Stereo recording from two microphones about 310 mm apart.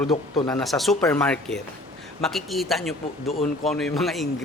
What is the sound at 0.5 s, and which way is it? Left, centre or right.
Speech, centre.